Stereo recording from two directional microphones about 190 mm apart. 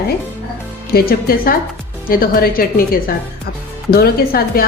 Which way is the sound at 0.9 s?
50° left (ahead or behind).